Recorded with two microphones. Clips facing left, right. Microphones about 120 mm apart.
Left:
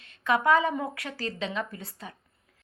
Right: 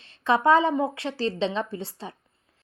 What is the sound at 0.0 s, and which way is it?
Speech, 30° right (ahead or behind).